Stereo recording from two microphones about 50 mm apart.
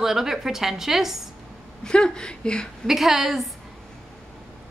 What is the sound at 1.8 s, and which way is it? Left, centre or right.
Speech, centre.